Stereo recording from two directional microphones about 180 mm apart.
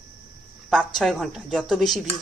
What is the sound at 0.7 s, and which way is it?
Speech, centre (ahead or behind).